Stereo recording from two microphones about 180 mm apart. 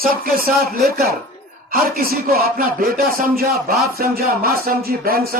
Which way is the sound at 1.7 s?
55° right (ahead or behind).